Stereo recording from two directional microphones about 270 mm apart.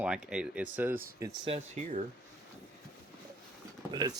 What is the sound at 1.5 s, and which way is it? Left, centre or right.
Speech, right.